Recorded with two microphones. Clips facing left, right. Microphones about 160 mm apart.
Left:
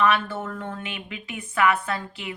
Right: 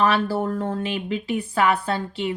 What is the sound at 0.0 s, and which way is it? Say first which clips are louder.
A woman's voice: right 3 dB; 35° right (ahead or behind).